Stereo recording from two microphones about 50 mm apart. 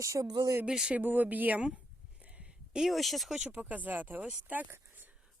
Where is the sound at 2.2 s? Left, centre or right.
Right.